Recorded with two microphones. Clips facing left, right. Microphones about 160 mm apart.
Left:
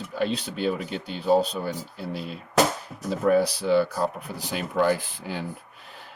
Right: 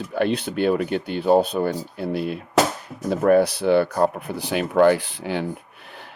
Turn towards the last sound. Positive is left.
turn(degrees=-70)  # may be behind; listen again after turning